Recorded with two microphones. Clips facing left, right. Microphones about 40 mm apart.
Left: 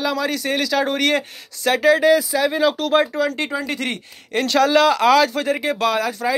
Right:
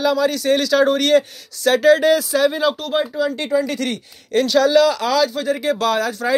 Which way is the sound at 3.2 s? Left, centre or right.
Left.